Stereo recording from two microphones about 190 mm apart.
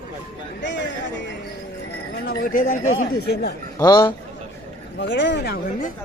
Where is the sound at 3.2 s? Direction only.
60° left (ahead or behind).